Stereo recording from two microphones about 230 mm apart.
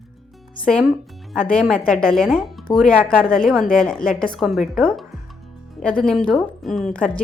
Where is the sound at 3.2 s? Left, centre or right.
Left.